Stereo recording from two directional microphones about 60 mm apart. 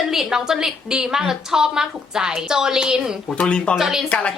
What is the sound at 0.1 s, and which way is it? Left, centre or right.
A woman's voice, centre.